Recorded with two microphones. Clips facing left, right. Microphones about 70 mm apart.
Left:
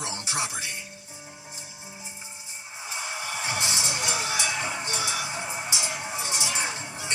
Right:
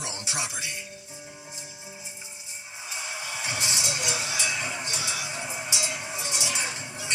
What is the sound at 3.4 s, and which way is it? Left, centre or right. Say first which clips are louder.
Music: left 1 dB; left.